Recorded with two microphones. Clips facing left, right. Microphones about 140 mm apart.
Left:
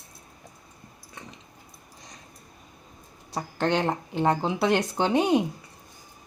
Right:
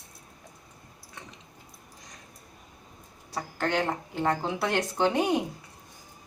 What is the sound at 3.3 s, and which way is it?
Speech, 20° left (ahead or behind).